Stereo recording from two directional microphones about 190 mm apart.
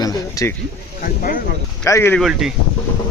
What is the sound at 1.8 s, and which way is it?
Speech, 10° left (ahead or behind).